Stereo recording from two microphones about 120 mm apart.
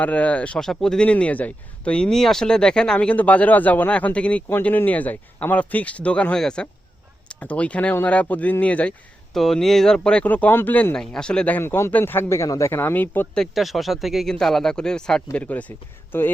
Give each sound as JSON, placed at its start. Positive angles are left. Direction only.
{"t": 0.0, "sound": "speech", "side_deg": 10}
{"t": 13.4, "sound": "speech", "side_deg": 0}